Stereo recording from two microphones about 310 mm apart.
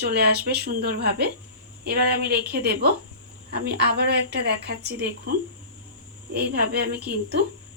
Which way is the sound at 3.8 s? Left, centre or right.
Right.